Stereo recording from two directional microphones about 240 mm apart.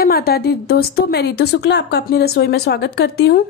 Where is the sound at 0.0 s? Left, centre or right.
Left.